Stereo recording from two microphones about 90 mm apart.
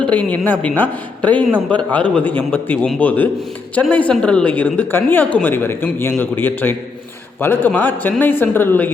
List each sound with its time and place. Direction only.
0.0 s a woman's voice: 15° left (ahead or behind)